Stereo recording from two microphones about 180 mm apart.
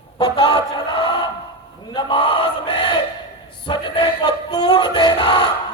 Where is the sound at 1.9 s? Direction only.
30° left (ahead or behind).